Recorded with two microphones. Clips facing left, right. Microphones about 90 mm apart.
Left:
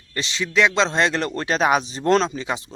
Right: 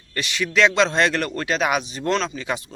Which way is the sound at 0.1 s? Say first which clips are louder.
Even; 20° left (ahead or behind).